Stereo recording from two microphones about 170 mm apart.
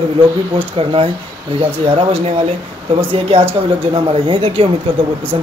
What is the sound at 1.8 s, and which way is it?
Speech, 35° right (ahead or behind).